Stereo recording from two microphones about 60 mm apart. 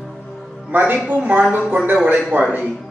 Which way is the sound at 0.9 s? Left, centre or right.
Right.